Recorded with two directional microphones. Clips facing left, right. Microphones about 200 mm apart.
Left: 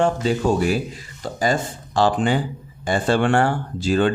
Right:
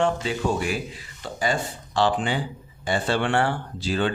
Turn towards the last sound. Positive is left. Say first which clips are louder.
# left 6 dB
turn(degrees=45)  # may be behind; listen again after turning